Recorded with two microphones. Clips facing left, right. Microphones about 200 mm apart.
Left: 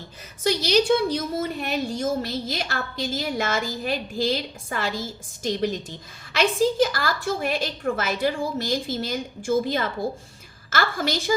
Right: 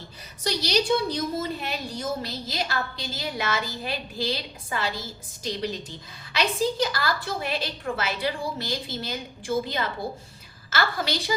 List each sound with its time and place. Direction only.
0.4 s a woman's voice: 50° left (ahead or behind)